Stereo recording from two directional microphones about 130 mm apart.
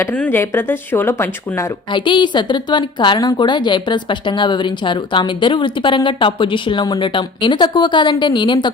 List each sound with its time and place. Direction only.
0.0 s speech: 15° left (ahead or behind)
1.9 s a woman's voice: 35° left (ahead or behind)